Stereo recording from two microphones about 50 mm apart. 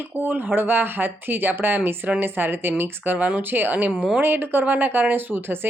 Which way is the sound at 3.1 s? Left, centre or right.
Right.